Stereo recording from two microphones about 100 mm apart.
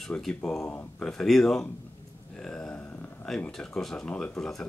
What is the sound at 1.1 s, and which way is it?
Speech, 5° left (ahead or behind).